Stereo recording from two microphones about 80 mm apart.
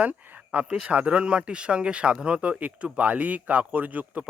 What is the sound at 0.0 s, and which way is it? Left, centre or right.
Speech, centre.